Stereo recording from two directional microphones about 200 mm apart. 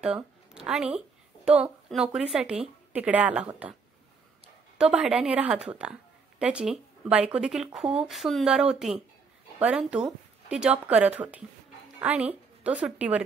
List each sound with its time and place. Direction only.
0.0 s speech: 5° right (ahead or behind)
4.7 s speech: 5° right (ahead or behind)
7.8 s speech: 30° right (ahead or behind)
8.1 s a woman's voice: centre (ahead or behind)